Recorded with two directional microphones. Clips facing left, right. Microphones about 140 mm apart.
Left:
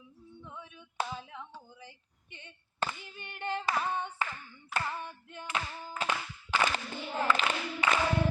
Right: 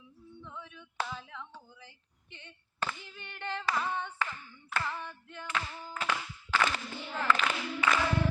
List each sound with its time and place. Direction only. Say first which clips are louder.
0.4 s a sound: right 1 dB; 15° left (ahead or behind)
2.3 s clapping: even; 15° left (ahead or behind)
7.3 s speech: right 2 dB; 20° left (ahead or behind)